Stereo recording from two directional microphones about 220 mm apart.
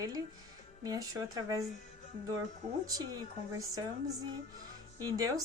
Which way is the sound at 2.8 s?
15° right (ahead or behind).